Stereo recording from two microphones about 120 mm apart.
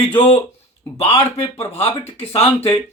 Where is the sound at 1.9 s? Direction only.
60° left (ahead or behind).